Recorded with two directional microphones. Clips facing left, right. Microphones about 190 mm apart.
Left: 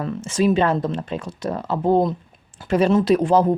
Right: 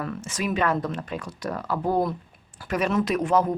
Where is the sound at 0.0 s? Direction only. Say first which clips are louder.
Left 9 dB; 25° left (ahead or behind).